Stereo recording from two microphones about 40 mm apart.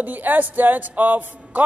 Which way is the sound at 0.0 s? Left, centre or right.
Right.